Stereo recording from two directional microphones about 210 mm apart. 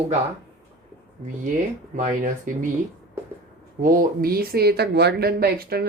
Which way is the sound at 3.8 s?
45° right (ahead or behind).